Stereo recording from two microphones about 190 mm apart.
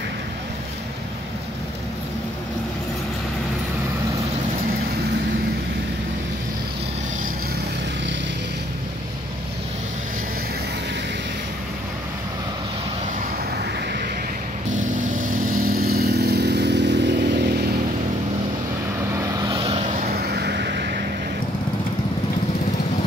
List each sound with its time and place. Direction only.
15.4 s vehicle: 50° right (ahead or behind)
19.1 s vehicle: 25° right (ahead or behind)
20.0 s vehicle: 55° right (ahead or behind)